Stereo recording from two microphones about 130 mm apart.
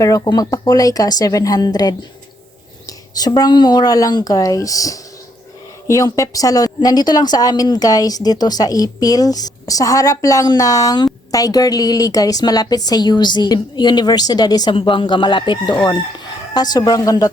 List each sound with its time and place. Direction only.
0.0 s a woman's voice: 25° left (ahead or behind)